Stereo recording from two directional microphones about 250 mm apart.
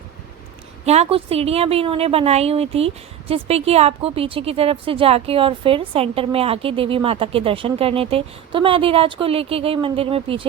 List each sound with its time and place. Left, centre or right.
0.9 s a woman's voice: right